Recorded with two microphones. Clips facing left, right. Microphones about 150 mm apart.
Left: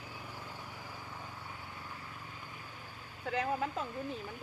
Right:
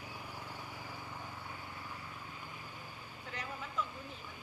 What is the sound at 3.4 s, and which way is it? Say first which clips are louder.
Speech: left 7 dB; 50° left (ahead or behind).